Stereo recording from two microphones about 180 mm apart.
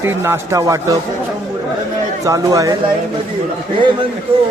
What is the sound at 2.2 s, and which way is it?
Speech, 20° right (ahead or behind).